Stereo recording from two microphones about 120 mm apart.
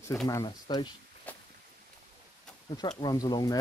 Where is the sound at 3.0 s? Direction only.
35° left (ahead or behind).